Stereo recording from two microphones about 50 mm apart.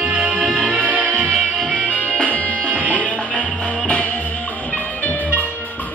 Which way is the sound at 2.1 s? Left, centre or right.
Left.